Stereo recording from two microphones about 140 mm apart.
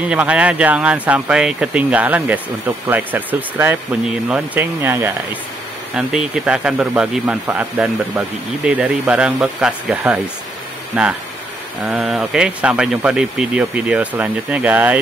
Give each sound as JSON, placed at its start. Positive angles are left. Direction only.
{"t": 0.0, "sound": "speech", "side_deg": -10}
{"t": 5.9, "sound": "speech", "side_deg": -5}